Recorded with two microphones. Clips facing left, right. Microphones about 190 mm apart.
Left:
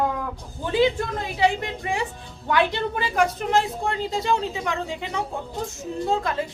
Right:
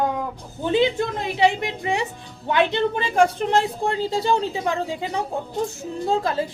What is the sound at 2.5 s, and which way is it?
A woman's voice, 20° right (ahead or behind).